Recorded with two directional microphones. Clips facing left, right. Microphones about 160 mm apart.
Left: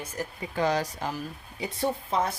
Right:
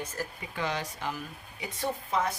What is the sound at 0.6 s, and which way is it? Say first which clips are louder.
Speech: left 7 dB; 40° left (ahead or behind).